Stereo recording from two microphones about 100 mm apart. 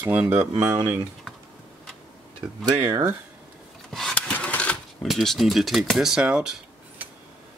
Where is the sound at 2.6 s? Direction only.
45° right (ahead or behind).